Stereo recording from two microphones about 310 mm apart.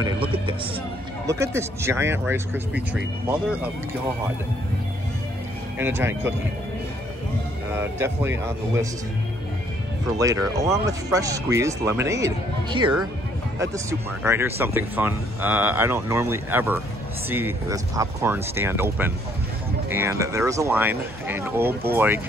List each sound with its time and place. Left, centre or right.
0.0 s music: centre
1.2 s speech: centre
5.8 s speech: centre
7.7 s speech: centre
10.1 s speech: centre